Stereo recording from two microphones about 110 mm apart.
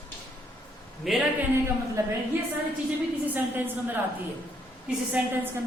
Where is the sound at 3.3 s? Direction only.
20° right (ahead or behind).